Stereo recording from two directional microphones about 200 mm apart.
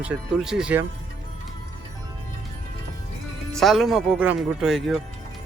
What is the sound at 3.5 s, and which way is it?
Speech, centre (ahead or behind).